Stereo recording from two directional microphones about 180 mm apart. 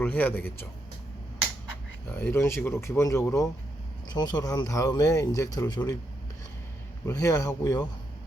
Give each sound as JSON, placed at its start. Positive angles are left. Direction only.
{"t": 0.0, "sound": "speech", "side_deg": 10}
{"t": 2.0, "sound": "speech", "side_deg": 10}
{"t": 7.0, "sound": "speech", "side_deg": 15}